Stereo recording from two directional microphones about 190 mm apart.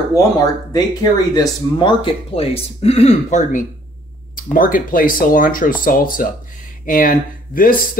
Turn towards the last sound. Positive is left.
turn(degrees=45)  # may be behind; listen again after turning